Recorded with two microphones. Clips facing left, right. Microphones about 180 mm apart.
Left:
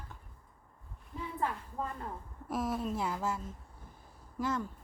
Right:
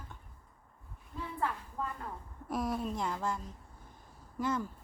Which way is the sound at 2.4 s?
Centre (ahead or behind).